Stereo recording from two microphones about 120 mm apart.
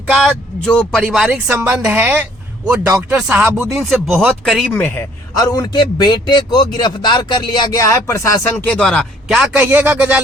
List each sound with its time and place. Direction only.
0.1 s speech: 5° right (ahead or behind)
0.6 s a man's voice: 10° left (ahead or behind)
0.9 s speech: 5° right (ahead or behind)
1.6 s speech: 20° right (ahead or behind)
3.7 s speech: centre (ahead or behind)
5.4 s a man's voice: 35° left (ahead or behind)
7.8 s speech: 25° left (ahead or behind); by 9.0 s 5° left (ahead or behind)
9.3 s speech: 10° right (ahead or behind)